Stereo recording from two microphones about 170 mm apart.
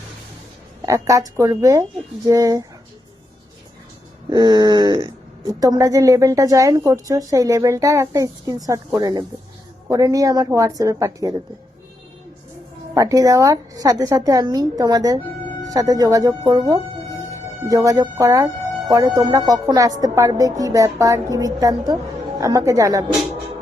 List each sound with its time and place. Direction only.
0.8 s a woman's voice: 20° right (ahead or behind)
4.3 s a woman's voice: 25° right (ahead or behind)
12.9 s a woman's voice: 20° right (ahead or behind)